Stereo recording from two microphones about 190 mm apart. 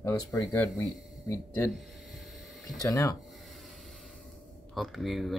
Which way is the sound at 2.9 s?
15° left (ahead or behind).